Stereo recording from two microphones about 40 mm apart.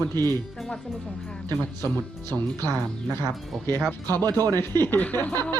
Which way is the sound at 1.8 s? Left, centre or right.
Left.